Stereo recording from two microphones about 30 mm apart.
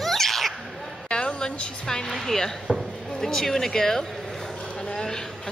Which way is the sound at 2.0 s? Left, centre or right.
Centre.